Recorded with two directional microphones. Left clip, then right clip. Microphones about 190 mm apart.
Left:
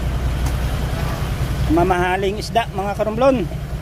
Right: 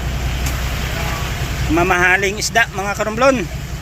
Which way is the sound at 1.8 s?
15° left (ahead or behind).